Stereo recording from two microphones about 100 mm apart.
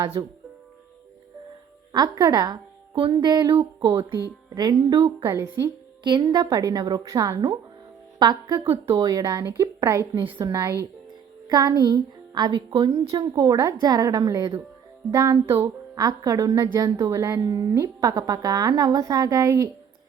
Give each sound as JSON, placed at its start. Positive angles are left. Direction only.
{"t": 0.2, "sound": "speech", "side_deg": -45}
{"t": 1.9, "sound": "speech", "side_deg": -45}
{"t": 3.5, "sound": "speech", "side_deg": -60}
{"t": 4.4, "sound": "a woman's voice", "side_deg": -40}
{"t": 5.3, "sound": "a woman's voice", "side_deg": -25}
{"t": 6.0, "sound": "speech", "side_deg": -45}
{"t": 8.6, "sound": "speech", "side_deg": -70}
{"t": 9.0, "sound": "a woman's voice", "side_deg": -40}
{"t": 11.4, "sound": "speech", "side_deg": -40}
{"t": 13.1, "sound": "a woman's voice", "side_deg": -40}
{"t": 15.1, "sound": "a woman's voice", "side_deg": -30}